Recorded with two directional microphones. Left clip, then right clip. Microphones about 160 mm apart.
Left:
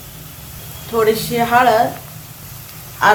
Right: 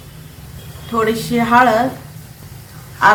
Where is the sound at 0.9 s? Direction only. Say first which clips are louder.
Left 2 dB; 20° left (ahead or behind).